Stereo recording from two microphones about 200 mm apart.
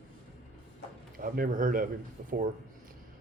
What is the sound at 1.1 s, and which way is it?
A man's voice, 45° right (ahead or behind).